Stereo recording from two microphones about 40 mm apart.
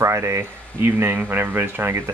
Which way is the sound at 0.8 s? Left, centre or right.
Right.